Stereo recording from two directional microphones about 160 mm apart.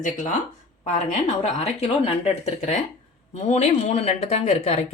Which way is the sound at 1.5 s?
40° left (ahead or behind).